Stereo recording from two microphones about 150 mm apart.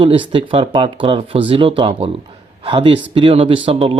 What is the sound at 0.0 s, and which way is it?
Speech, 35° right (ahead or behind).